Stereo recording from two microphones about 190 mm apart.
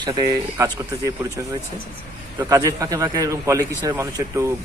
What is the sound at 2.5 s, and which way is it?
A man's voice, 20° right (ahead or behind).